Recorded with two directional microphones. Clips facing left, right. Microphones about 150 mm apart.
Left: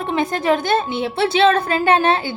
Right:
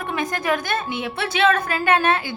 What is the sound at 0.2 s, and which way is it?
A woman's voice, 30° left (ahead or behind).